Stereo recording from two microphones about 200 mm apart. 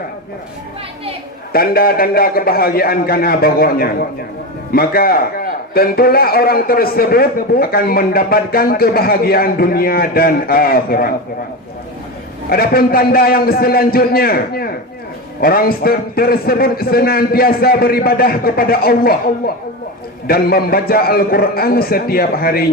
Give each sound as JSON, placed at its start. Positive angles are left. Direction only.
{"t": 1.5, "sound": "a man's voice", "side_deg": 50}
{"t": 12.5, "sound": "a man's voice", "side_deg": 50}
{"t": 20.2, "sound": "a man's voice", "side_deg": 50}